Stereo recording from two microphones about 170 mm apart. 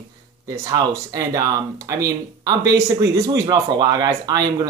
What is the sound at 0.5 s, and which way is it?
Speech, 20° right (ahead or behind).